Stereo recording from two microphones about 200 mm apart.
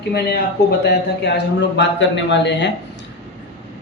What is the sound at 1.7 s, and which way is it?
Speech, 60° left (ahead or behind).